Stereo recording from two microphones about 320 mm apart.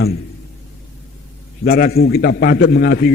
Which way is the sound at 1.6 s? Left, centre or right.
Left.